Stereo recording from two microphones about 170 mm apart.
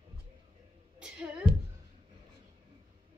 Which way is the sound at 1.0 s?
5° right (ahead or behind).